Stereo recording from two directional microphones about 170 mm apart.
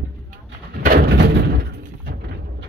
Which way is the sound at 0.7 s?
65° right (ahead or behind).